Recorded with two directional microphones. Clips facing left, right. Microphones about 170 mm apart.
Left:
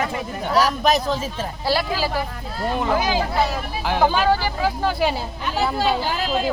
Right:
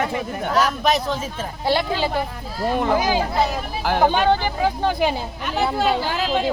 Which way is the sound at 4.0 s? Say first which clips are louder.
Right 1 dB; 25° right (ahead or behind).